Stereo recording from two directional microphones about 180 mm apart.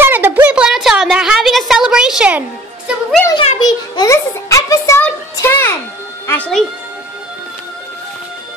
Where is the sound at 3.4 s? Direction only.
25° left (ahead or behind).